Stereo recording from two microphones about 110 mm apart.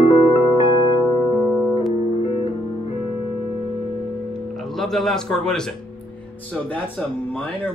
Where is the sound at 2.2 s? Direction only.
65° left (ahead or behind).